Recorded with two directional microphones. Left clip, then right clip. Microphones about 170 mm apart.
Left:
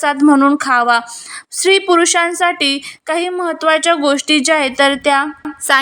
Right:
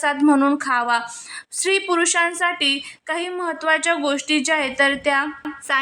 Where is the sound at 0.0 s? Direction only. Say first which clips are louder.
Left 6 dB; 20° left (ahead or behind).